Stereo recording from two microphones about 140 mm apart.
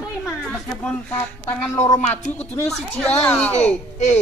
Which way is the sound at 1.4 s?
15° left (ahead or behind).